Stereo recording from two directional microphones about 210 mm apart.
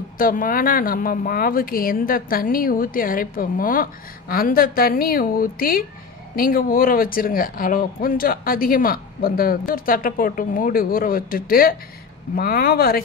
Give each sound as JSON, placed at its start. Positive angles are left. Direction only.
{"t": 0.2, "sound": "speech", "side_deg": 40}